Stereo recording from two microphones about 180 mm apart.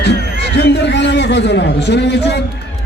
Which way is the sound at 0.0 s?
70° left (ahead or behind).